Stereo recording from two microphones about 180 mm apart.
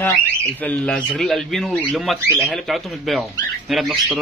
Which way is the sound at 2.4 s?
Centre (ahead or behind).